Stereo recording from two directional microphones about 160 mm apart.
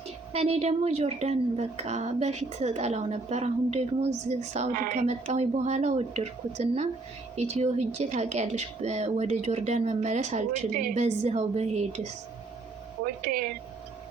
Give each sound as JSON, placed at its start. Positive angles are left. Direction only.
{"t": 0.3, "sound": "speech", "side_deg": -40}